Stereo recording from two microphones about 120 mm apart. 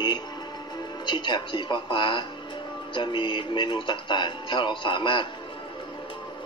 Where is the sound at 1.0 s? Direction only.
40° left (ahead or behind).